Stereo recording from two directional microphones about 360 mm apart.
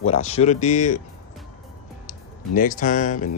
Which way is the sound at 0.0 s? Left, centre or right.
Centre.